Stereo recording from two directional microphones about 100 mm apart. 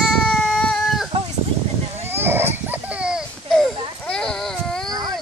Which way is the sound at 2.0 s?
20° right (ahead or behind).